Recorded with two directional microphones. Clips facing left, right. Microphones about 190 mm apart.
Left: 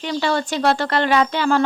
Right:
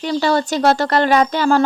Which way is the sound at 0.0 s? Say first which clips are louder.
Right 4 dB; 40° right (ahead or behind).